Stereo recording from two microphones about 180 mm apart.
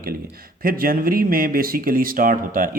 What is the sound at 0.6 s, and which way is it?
Speech, 55° right (ahead or behind).